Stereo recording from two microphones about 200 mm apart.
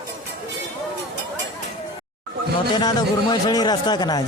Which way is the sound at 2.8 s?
20° left (ahead or behind).